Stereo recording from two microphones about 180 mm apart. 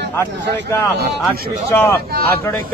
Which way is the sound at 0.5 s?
60° right (ahead or behind).